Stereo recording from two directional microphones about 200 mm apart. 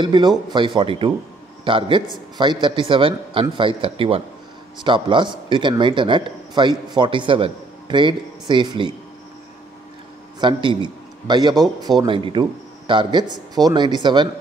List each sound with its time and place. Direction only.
0.0 s a man's voice: 20° right (ahead or behind)
10.4 s a man's voice: 25° right (ahead or behind)